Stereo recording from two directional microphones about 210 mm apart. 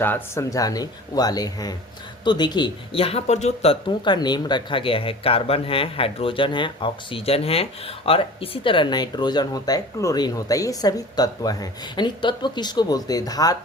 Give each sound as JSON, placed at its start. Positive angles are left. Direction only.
{"t": 0.0, "sound": "speech", "side_deg": 10}